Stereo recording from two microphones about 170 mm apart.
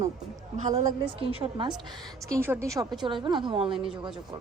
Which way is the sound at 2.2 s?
15° right (ahead or behind).